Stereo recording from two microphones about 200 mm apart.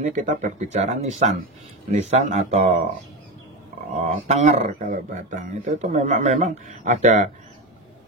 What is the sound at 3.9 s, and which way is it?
A man's voice, 35° right (ahead or behind).